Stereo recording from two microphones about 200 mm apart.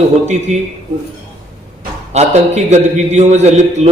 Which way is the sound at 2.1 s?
35° right (ahead or behind).